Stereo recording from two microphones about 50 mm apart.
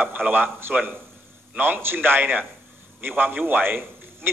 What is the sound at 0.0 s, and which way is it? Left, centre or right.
A man's voice, right.